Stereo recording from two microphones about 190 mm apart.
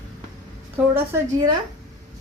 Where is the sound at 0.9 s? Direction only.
15° right (ahead or behind).